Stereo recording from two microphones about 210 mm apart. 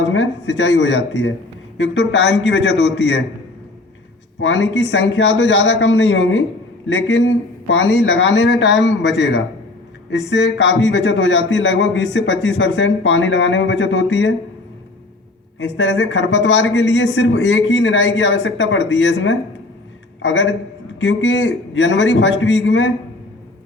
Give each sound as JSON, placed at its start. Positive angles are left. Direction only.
{"t": 0.1, "sound": "speech", "side_deg": 65}
{"t": 4.4, "sound": "speech", "side_deg": 60}
{"t": 15.5, "sound": "speech", "side_deg": 60}